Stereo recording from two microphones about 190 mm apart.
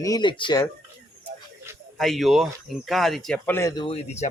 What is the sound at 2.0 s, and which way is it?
Speech, centre (ahead or behind).